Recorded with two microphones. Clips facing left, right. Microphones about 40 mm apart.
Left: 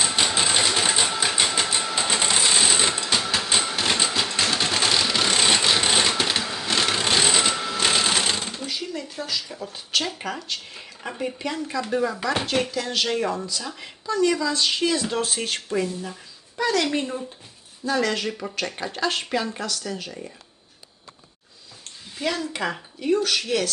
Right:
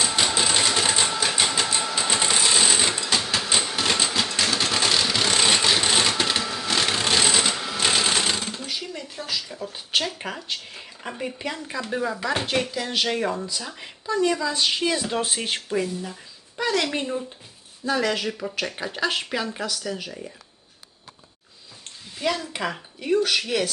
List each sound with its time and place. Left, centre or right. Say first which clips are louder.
0.0 s sewing machine: even; centre
9.4 s a sound: even; centre
9.6 s speech: right 2 dB; centre
10.0 s speech: left 1 dB; centre
12.7 s speech: even; centre
15.7 s speech: left 1 dB; centre
16.6 s speech: left 1 dB; right
17.8 s speech: even; centre
22.2 s speech: even; centre